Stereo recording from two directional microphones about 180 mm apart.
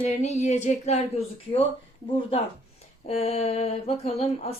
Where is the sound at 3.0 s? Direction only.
35° left (ahead or behind).